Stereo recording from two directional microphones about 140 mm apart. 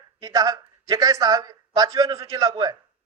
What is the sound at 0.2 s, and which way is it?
A man's voice, 25° right (ahead or behind).